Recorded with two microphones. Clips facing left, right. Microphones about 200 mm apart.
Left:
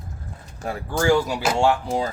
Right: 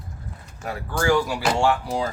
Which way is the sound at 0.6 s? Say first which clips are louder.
Left 2 dB; 30° left (ahead or behind).